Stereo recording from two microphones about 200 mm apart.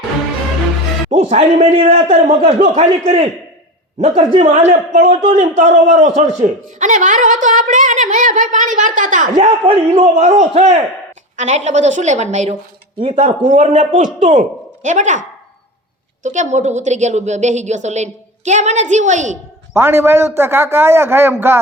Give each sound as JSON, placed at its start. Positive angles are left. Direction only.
{"t": 1.1, "sound": "a man's voice", "side_deg": -35}
{"t": 4.4, "sound": "a man's voice", "side_deg": -35}
{"t": 16.2, "sound": "a man's voice", "side_deg": -40}
{"t": 19.7, "sound": "a man's voice", "side_deg": -10}